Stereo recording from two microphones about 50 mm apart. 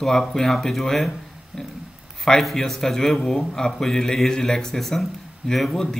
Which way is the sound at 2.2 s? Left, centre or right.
Centre.